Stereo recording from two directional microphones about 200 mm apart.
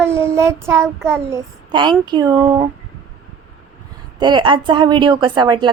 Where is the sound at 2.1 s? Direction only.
20° right (ahead or behind).